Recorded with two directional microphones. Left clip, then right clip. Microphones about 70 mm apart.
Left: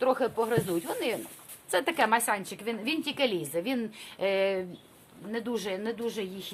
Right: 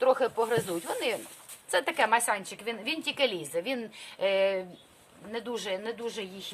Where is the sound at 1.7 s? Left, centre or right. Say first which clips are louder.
Even; left.